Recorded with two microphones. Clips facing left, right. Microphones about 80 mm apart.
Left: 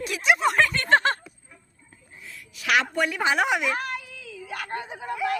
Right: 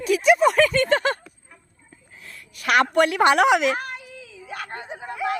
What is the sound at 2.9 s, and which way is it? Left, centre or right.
Speech, right.